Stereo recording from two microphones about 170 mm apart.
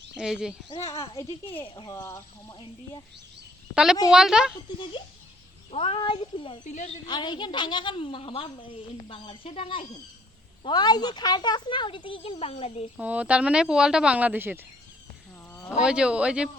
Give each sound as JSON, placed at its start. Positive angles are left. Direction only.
{"t": 0.2, "sound": "speech", "side_deg": -5}
{"t": 0.8, "sound": "a woman's voice", "side_deg": 15}
{"t": 1.0, "sound": "a woman's voice", "side_deg": 25}
{"t": 4.1, "sound": "speech", "side_deg": -5}
{"t": 5.7, "sound": "speech", "side_deg": 35}
{"t": 6.7, "sound": "a woman's voice", "side_deg": 45}
{"t": 7.1, "sound": "a woman's voice", "side_deg": 25}
{"t": 13.0, "sound": "speech", "side_deg": -10}
{"t": 15.8, "sound": "speech", "side_deg": -5}